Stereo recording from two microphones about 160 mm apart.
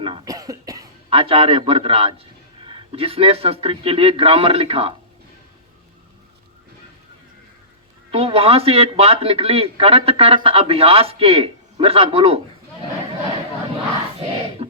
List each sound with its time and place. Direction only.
0.0 s cough: 25° right (ahead or behind)
1.1 s a man's voice: 35° right (ahead or behind)
8.1 s a man's voice: 40° right (ahead or behind)
14.6 s beatboxing: 35° right (ahead or behind)